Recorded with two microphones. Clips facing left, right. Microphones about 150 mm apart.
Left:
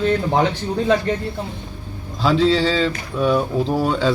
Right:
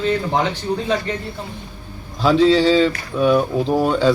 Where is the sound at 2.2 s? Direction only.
Centre (ahead or behind).